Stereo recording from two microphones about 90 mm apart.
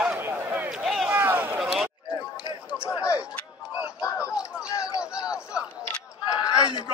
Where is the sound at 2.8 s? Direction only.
35° left (ahead or behind).